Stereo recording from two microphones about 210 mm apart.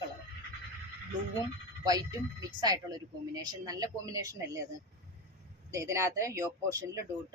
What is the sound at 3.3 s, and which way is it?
A woman's voice, 15° right (ahead or behind).